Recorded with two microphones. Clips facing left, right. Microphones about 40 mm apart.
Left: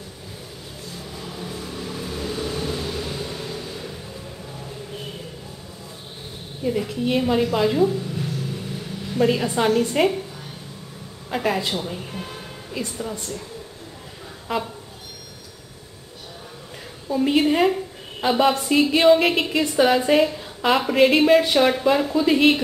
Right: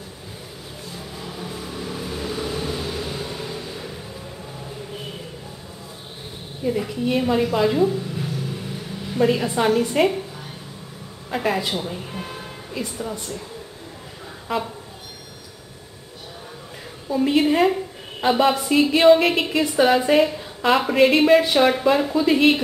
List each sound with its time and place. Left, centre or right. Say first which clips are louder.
0.9 s vehicle: right 1 dB; centre
6.6 s a woman's voice: even; centre
11.2 s a woman's voice: even; centre
14.5 s a woman's voice: right 1 dB; centre
17.1 s a woman's voice: even; centre